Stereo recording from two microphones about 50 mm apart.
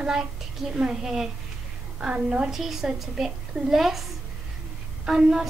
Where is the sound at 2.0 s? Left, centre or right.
Right.